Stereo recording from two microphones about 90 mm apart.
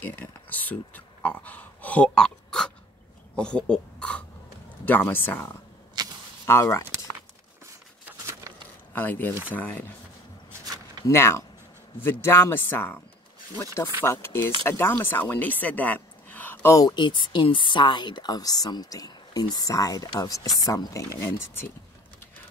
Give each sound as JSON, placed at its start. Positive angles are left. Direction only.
{"t": 0.0, "sound": "speech", "side_deg": 20}
{"t": 6.0, "sound": "a sound", "side_deg": -55}
{"t": 6.4, "sound": "speech", "side_deg": 30}
{"t": 8.9, "sound": "speech", "side_deg": 20}
{"t": 10.6, "sound": "a sound", "side_deg": -45}
{"t": 11.1, "sound": "speech", "side_deg": 30}
{"t": 14.0, "sound": "speech", "side_deg": 25}
{"t": 16.6, "sound": "speech", "side_deg": 40}
{"t": 16.9, "sound": "speech", "side_deg": 60}